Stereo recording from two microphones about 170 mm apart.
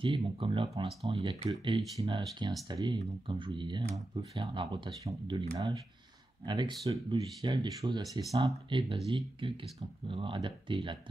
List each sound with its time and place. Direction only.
0.0 s speech: 30° right (ahead or behind)